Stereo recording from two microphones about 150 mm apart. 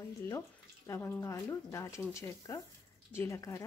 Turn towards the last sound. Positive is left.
turn(degrees=20)  # may be behind; listen again after turning